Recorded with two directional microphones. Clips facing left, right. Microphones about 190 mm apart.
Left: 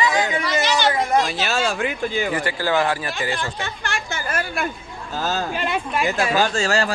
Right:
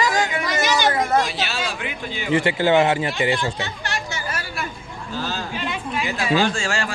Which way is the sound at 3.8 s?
50° left (ahead or behind).